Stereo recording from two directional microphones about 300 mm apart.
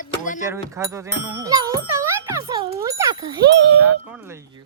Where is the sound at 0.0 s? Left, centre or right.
Left.